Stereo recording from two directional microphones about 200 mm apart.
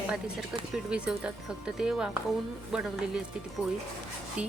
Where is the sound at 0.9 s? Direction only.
5° right (ahead or behind).